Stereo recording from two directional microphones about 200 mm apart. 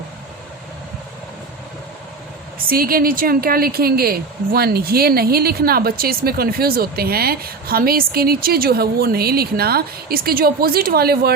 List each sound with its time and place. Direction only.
2.6 s a woman's voice: 45° right (ahead or behind)